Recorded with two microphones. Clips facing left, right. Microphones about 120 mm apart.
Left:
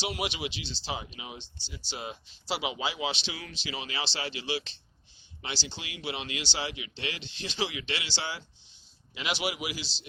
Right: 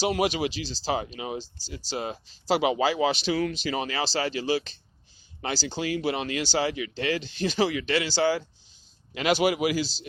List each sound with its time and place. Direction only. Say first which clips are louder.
0.0 s speech: right 9 dB; 40° right (ahead or behind)